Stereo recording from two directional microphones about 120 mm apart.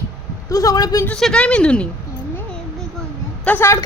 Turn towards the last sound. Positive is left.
turn(degrees=15)  # may be behind; listen again after turning